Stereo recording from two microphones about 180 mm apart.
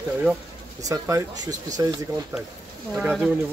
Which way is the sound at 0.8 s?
20° right (ahead or behind).